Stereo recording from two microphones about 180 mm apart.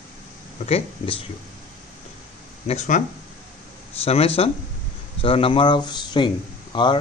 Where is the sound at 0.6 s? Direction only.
35° left (ahead or behind).